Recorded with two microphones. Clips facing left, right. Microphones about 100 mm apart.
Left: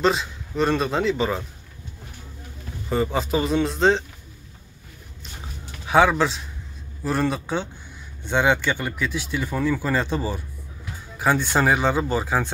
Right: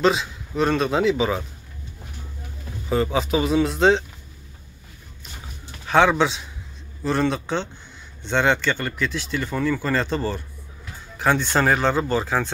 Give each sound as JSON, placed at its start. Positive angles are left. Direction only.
{"t": 0.0, "sound": "a man's voice", "side_deg": 0}
{"t": 2.9, "sound": "a man's voice", "side_deg": 0}
{"t": 5.9, "sound": "a man's voice", "side_deg": 5}